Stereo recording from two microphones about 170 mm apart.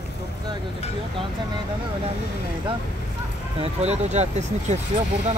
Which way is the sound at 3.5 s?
40° right (ahead or behind).